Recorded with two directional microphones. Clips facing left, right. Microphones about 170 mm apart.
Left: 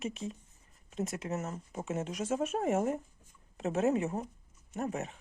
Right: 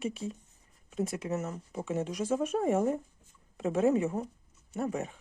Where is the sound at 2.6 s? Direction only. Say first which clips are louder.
Right 3 dB; 30° right (ahead or behind).